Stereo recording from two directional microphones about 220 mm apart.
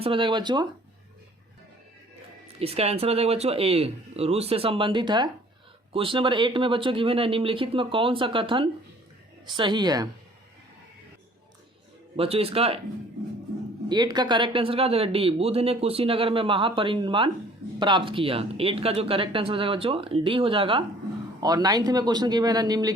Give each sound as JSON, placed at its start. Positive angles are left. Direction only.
{"t": 0.0, "sound": "speech", "side_deg": -25}
{"t": 2.6, "sound": "speech", "side_deg": -25}
{"t": 12.1, "sound": "speech", "side_deg": -25}
{"t": 13.8, "sound": "speech", "side_deg": -20}